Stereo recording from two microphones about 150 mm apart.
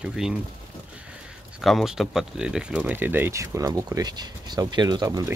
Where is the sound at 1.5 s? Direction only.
Centre (ahead or behind).